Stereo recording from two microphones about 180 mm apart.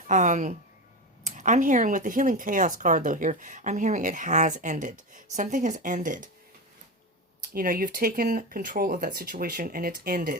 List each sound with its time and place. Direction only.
0.1 s speech: 45° right (ahead or behind)
7.5 s speech: 50° right (ahead or behind)